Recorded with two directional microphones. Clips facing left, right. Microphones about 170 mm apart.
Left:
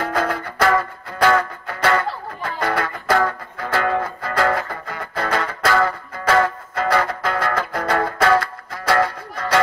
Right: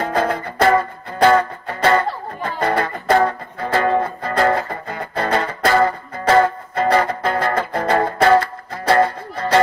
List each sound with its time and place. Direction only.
0.0 s music: 30° right (ahead or behind)